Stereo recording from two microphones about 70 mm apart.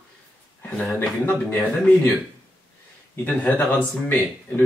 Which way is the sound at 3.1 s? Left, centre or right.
Left.